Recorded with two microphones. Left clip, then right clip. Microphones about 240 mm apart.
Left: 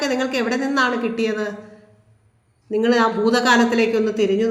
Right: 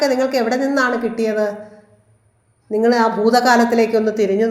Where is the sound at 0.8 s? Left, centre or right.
Centre.